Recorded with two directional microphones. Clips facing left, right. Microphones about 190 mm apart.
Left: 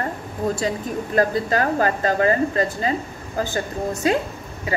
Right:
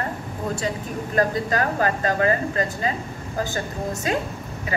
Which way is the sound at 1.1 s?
35° left (ahead or behind).